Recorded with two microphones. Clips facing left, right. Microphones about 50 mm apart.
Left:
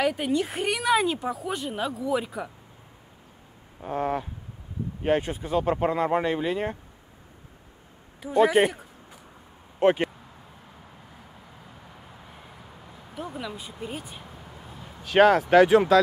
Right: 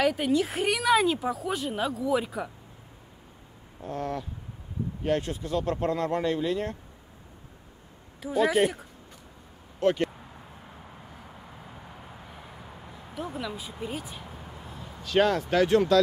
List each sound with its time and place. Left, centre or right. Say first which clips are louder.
0.0 s speech: even; centre
3.8 s speech: left 5 dB; left
8.2 s speech: left 4 dB; centre
8.6 s a sound: left 1 dB; centre
9.8 s speech: left 4 dB; left
13.1 s speech: even; centre
15.0 s speech: left 6 dB; centre